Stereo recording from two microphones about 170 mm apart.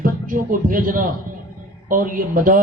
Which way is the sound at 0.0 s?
55° right (ahead or behind).